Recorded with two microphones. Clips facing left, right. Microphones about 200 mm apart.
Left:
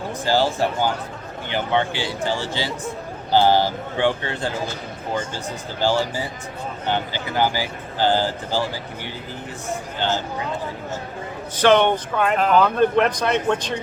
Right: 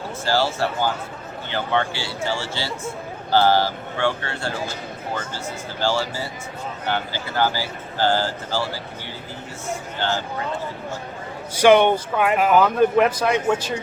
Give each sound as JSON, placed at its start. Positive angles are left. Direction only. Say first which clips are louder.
{"t": 0.3, "sound": "speech", "louder": "left 2 dB", "side_deg": 15}
{"t": 5.8, "sound": "speech", "louder": "left 2 dB", "side_deg": 15}
{"t": 10.0, "sound": "speech", "louder": "left 1 dB", "side_deg": 15}
{"t": 11.5, "sound": "speech", "louder": "right 2 dB", "side_deg": -10}